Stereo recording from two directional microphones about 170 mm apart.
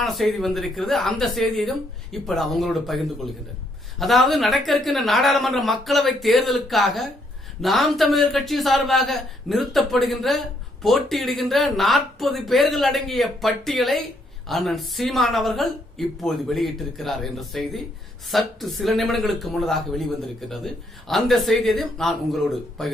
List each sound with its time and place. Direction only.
0.0 s a woman's voice: centre (ahead or behind)